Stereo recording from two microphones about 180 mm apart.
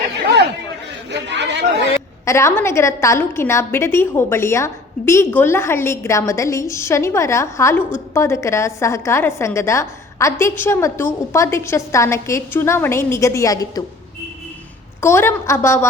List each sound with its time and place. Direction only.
1.1 s chatter: 75° right (ahead or behind)
2.2 s a woman's voice: 15° left (ahead or behind)
15.0 s a woman's voice: 15° left (ahead or behind)